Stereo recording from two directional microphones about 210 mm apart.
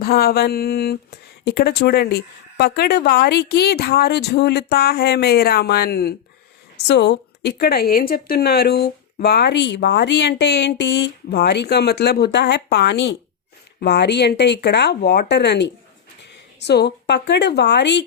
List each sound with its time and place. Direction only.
0.0 s mantra: 45° left (ahead or behind)
1.5 s speech: 50° left (ahead or behind)